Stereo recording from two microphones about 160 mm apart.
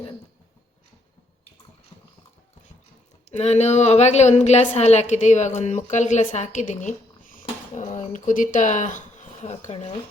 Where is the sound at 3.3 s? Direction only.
45° left (ahead or behind).